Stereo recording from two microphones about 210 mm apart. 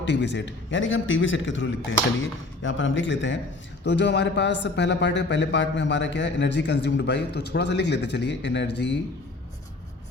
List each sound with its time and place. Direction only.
0.0 s speech: 55° left (ahead or behind)